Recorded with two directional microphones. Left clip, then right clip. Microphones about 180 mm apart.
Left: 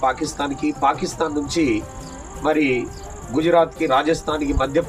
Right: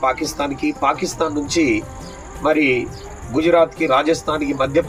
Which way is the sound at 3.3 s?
10° left (ahead or behind).